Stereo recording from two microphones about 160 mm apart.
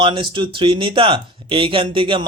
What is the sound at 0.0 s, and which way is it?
Speech, 30° right (ahead or behind).